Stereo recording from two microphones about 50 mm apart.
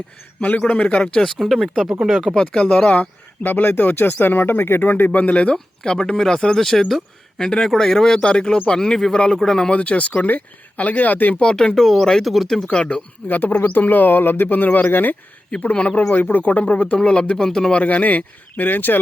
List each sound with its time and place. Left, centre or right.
0.7 s speech: left
1.4 s speech: centre
2.3 s speech: centre
2.9 s speech: left
5.2 s speech: left; by 8.2 s centre
8.2 s speech: centre
9.8 s speech: left
11.3 s speech: centre
12.6 s speech: left
13.2 s speech: left
16.1 s speech: left; by 17.7 s centre
17.7 s speech: left